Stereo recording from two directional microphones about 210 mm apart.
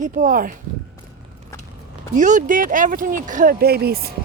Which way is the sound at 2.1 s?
35° right (ahead or behind).